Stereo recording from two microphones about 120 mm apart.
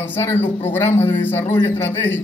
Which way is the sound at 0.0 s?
20° left (ahead or behind).